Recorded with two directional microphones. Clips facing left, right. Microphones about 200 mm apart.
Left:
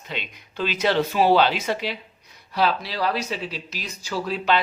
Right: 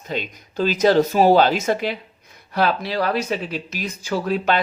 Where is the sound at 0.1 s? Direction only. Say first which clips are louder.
Right 7 dB; 40° right (ahead or behind).